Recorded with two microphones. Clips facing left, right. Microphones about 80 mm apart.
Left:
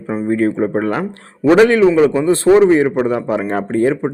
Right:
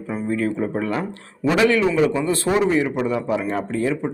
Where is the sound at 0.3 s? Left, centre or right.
Left.